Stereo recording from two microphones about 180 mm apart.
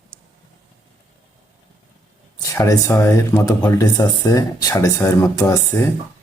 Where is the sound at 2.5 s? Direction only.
15° left (ahead or behind).